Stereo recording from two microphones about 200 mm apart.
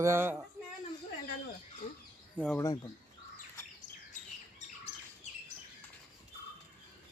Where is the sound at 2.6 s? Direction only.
15° left (ahead or behind).